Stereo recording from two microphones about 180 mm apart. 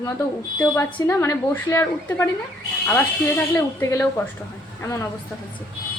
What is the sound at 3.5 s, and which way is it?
A woman's voice, 15° left (ahead or behind).